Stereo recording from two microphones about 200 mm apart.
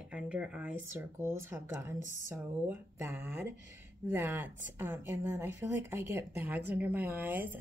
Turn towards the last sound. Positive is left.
turn(degrees=-10)  # may be behind; listen again after turning